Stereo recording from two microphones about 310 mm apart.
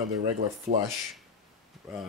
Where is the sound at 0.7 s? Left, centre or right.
Right.